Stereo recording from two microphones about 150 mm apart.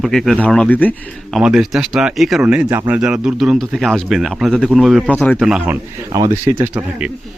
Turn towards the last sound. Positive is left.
turn(degrees=-15)  # may be behind; listen again after turning